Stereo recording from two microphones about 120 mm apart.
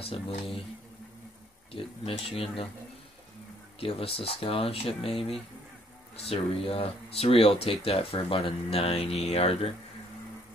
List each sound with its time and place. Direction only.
0.0 s speech: 55° left (ahead or behind)
1.7 s speech: 50° left (ahead or behind)
3.8 s speech: 50° left (ahead or behind)